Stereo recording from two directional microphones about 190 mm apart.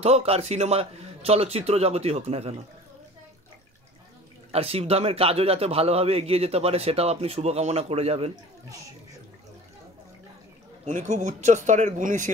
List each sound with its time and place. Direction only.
0.0 s a man's voice: 35° right (ahead or behind)
4.5 s a man's voice: 30° right (ahead or behind)
10.9 s a man's voice: 40° right (ahead or behind)